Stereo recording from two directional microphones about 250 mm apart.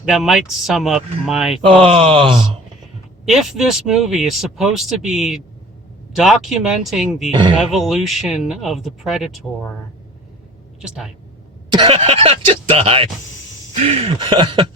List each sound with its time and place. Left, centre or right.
0.0 s speech: centre
1.6 s speech: right
3.2 s speech: centre
10.8 s speech: centre
11.7 s speech: right